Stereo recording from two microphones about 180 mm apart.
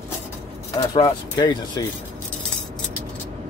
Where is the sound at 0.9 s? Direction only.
25° left (ahead or behind).